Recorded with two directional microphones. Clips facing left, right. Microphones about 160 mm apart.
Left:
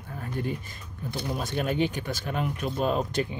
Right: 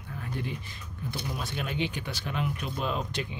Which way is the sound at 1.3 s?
45° left (ahead or behind).